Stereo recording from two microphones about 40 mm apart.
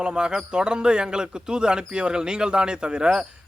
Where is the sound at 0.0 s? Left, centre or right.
Right.